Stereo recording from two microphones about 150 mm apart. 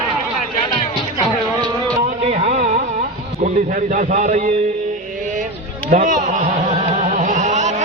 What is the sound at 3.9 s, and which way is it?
Speech, 55° right (ahead or behind).